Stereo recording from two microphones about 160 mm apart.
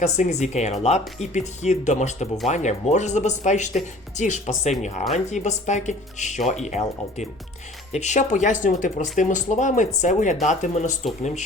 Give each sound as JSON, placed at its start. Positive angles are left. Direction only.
{"t": 0.0, "sound": "speech", "side_deg": 45}